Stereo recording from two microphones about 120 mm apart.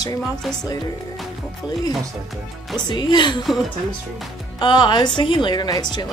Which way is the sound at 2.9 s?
40° left (ahead or behind).